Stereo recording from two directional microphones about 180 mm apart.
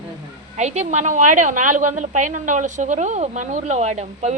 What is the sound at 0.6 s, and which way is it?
A woman's voice, 40° right (ahead or behind).